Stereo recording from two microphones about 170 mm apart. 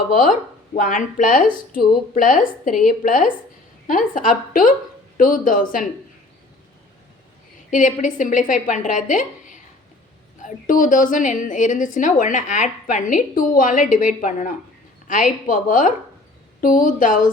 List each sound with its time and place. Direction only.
0.1 s a woman's voice: 55° left (ahead or behind)
7.7 s a woman's voice: 50° left (ahead or behind)